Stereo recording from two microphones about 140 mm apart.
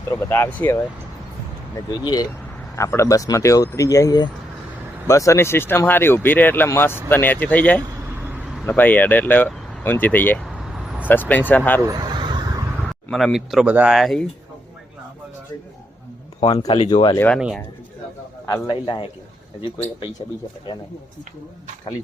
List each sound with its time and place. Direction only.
0.1 s speech: 15° left (ahead or behind)
1.7 s speech: 30° left (ahead or behind); by 7.9 s 10° left (ahead or behind)
8.0 s vehicle: 10° right (ahead or behind)
8.6 s speech: 10° left (ahead or behind)
10.4 s vehicle: 5° right (ahead or behind)
11.1 s speech: 15° left (ahead or behind)
11.8 s vehicle: 25° right (ahead or behind)
12.7 s speech: 5° left (ahead or behind)
16.4 s a man's voice: 45° left (ahead or behind)
17.2 s speech: 10° left (ahead or behind)
18.4 s a man's voice: 30° left (ahead or behind)